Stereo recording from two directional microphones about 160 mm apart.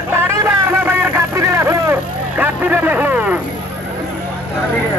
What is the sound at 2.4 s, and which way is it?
Hubbub, 10° right (ahead or behind).